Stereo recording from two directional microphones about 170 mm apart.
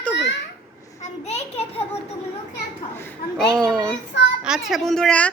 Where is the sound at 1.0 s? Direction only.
40° left (ahead or behind).